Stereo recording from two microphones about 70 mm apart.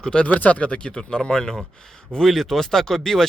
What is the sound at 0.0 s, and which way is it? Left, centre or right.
Speech, centre.